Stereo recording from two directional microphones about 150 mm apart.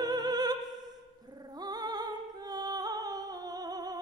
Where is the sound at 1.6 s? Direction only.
25° right (ahead or behind).